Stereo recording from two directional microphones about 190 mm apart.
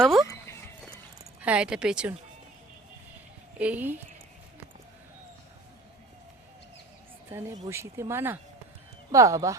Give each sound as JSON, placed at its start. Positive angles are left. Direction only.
{"t": 0.0, "sound": "a sound", "side_deg": 0}
{"t": 1.4, "sound": "speech", "side_deg": -5}
{"t": 3.6, "sound": "speech", "side_deg": -10}
{"t": 7.7, "sound": "speech", "side_deg": -15}